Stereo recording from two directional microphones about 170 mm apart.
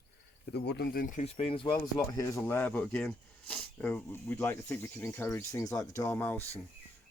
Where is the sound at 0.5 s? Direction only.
75° left (ahead or behind); by 1.7 s 30° left (ahead or behind).